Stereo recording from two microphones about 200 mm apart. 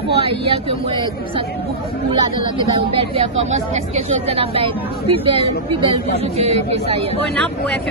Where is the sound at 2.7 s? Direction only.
30° right (ahead or behind).